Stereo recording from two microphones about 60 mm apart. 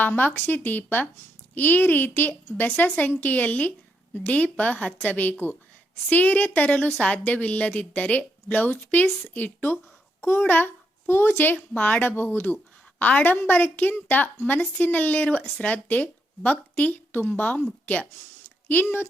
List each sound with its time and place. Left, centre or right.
0.0 s a child's voice: left
11.5 s speech: left
18.7 s speech: left